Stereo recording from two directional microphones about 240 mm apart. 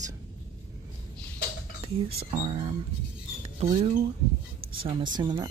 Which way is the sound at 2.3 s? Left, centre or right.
Right.